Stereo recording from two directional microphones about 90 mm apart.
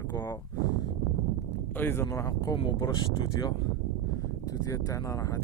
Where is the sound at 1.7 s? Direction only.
25° left (ahead or behind).